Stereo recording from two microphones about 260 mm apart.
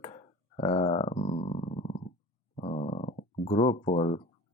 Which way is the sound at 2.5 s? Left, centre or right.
Left.